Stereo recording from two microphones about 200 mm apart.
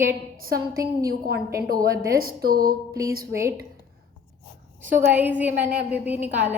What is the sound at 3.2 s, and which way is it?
Speech, 15° right (ahead or behind).